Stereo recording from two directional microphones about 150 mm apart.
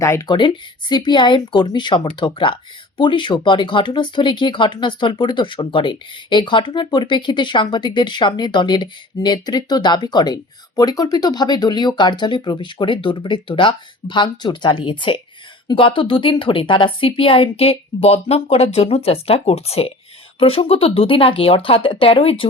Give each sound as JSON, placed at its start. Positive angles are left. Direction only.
{"t": 0.0, "sound": "speech", "side_deg": 20}